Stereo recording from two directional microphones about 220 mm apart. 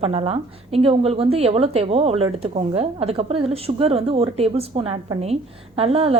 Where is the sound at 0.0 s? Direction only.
30° right (ahead or behind).